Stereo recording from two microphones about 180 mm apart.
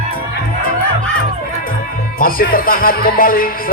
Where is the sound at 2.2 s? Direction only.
55° left (ahead or behind).